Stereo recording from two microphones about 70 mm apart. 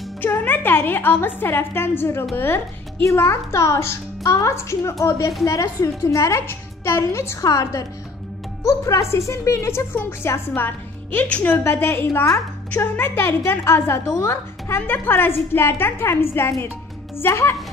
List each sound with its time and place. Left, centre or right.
0.2 s music: left
1.2 s a woman's voice: left
7.4 s a woman's voice: left
9.9 s a woman's voice: left
11.6 s a woman's voice: left